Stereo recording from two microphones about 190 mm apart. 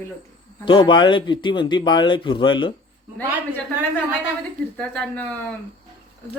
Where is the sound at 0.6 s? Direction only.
25° left (ahead or behind).